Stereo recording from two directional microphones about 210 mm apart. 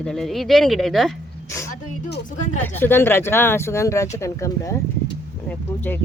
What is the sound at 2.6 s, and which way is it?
Speech, 10° left (ahead or behind).